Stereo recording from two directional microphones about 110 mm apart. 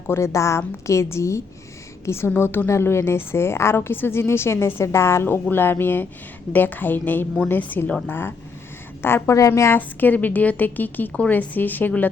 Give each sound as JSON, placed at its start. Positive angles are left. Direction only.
{"t": 0.1, "sound": "a woman's voice", "side_deg": 25}